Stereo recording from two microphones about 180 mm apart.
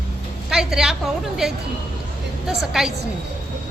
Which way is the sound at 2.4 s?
Centre (ahead or behind).